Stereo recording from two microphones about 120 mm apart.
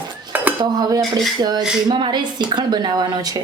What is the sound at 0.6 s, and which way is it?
Speech, 35° right (ahead or behind).